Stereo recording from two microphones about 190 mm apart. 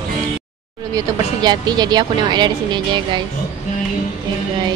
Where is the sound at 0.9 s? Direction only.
20° right (ahead or behind).